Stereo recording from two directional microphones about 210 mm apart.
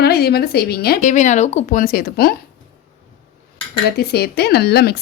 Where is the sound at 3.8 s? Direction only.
50° left (ahead or behind).